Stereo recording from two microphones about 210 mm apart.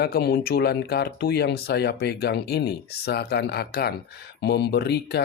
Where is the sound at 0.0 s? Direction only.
50° left (ahead or behind).